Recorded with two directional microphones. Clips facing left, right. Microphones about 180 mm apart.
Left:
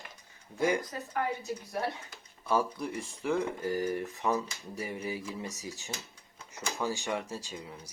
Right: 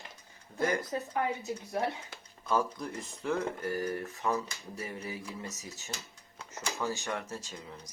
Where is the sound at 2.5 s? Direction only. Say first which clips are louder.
Left 1 dB; 10° left (ahead or behind).